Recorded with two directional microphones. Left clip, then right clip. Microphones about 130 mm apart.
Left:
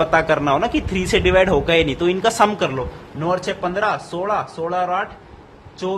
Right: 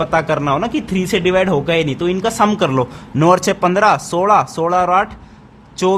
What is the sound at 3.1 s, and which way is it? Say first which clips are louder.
A man's voice: right 9 dB; 60° right (ahead or behind).